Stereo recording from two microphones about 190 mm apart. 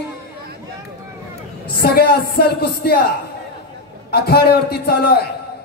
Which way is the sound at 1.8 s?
55° left (ahead or behind).